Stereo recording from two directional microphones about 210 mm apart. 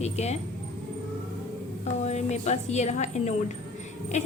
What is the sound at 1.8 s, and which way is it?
A woman's voice, 30° left (ahead or behind).